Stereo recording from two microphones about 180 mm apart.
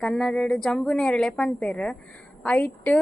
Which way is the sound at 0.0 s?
Centre (ahead or behind).